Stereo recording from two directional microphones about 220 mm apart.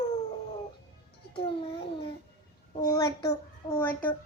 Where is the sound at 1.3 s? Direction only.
25° left (ahead or behind).